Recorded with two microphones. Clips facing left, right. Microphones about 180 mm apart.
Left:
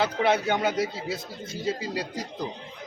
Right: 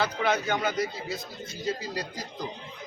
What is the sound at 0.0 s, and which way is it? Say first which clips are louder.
A man's voice: left 3 dB; 25° left (ahead or behind).